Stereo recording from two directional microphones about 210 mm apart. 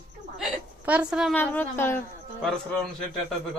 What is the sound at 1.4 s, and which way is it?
Speech, 10° left (ahead or behind).